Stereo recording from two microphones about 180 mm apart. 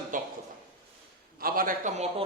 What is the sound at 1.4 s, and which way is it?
Speech, 50° right (ahead or behind).